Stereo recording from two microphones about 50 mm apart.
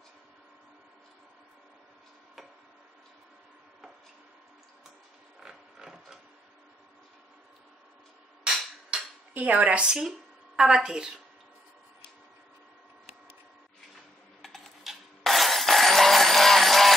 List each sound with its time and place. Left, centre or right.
5.4 s a sound: centre
8.9 s dishes: centre
9.3 s a woman's voice: right
9.8 s speech: centre
14.4 s a sound: centre
14.8 s vehicle: centre